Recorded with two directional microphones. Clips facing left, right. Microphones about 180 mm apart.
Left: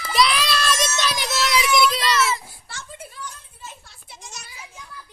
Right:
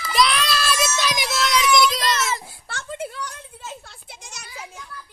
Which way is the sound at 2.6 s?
60° right (ahead or behind).